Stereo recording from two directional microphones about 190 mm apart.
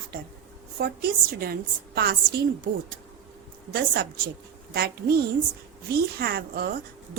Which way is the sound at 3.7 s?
55° right (ahead or behind).